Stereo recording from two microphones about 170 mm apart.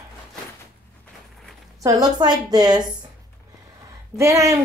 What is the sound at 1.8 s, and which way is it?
A woman's voice, 20° right (ahead or behind).